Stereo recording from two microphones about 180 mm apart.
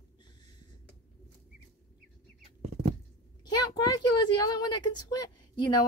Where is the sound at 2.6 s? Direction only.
35° right (ahead or behind).